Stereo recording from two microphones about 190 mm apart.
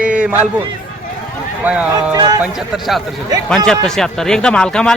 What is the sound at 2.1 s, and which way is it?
Speech, 20° right (ahead or behind).